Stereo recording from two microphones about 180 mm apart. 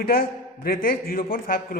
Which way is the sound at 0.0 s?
55° left (ahead or behind).